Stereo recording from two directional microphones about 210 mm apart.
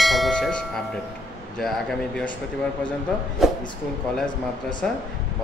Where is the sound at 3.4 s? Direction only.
Centre (ahead or behind).